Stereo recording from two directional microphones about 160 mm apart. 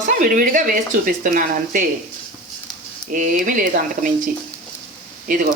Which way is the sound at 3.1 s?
60° right (ahead or behind).